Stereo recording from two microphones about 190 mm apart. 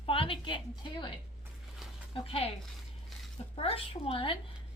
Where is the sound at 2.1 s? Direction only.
30° left (ahead or behind).